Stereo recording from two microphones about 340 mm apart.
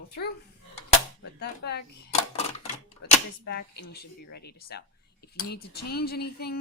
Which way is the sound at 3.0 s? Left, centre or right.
Left.